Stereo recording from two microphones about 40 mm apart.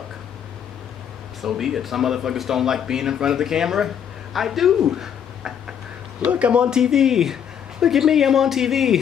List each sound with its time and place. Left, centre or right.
1.4 s speech: centre
4.8 s a sound: centre
6.2 s speech: right; by 8.9 s centre